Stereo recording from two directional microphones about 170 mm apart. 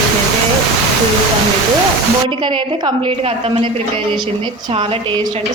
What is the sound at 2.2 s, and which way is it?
A woman's voice, 30° right (ahead or behind).